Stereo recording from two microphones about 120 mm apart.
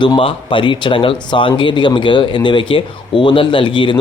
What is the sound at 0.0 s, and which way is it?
Speech, 45° left (ahead or behind).